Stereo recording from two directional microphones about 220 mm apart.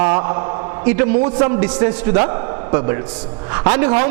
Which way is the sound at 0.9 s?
25° right (ahead or behind).